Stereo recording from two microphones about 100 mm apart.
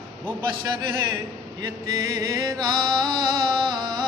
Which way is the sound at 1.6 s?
40° right (ahead or behind).